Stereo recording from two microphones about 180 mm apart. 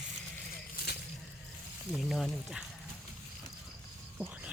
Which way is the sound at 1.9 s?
Centre (ahead or behind).